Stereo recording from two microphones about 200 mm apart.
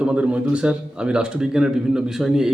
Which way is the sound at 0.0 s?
5° right (ahead or behind).